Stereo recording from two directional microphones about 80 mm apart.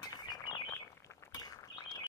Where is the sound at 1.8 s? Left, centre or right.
Left.